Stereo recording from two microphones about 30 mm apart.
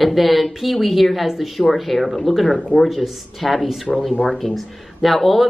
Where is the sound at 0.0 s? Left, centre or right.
Centre.